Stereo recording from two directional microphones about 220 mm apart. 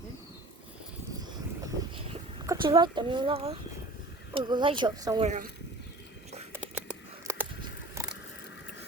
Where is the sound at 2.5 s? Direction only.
20° right (ahead or behind).